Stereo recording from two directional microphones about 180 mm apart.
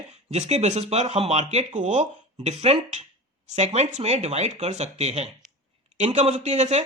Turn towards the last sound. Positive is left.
turn(degrees=-40)  # may be behind; listen again after turning